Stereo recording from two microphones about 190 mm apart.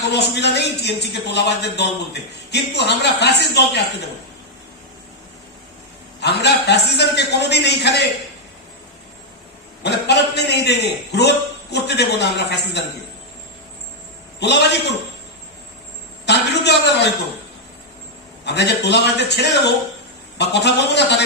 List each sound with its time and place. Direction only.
0.1 s a man's voice: 65° left (ahead or behind)
6.1 s a man's voice: 60° left (ahead or behind)
9.8 s a man's voice: 60° left (ahead or behind)
14.3 s a man's voice: 60° left (ahead or behind)
16.2 s a man's voice: 60° left (ahead or behind)
18.4 s a man's voice: 60° left (ahead or behind)